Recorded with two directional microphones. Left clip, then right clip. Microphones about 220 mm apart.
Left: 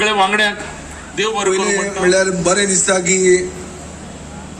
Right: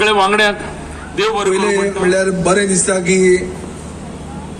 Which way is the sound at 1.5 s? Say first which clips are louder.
Right 2 dB; 10° left (ahead or behind).